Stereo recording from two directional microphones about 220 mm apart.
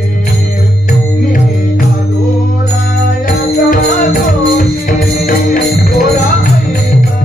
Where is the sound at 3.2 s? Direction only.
40° left (ahead or behind).